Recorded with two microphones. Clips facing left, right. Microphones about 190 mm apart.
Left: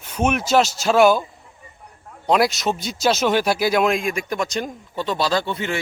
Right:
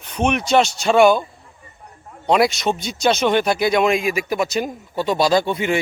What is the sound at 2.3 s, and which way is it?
Speech, centre (ahead or behind).